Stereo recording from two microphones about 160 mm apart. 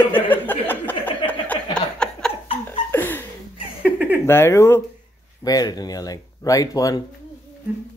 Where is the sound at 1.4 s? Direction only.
5° left (ahead or behind).